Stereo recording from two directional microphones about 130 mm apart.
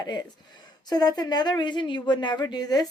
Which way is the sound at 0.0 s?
35° left (ahead or behind).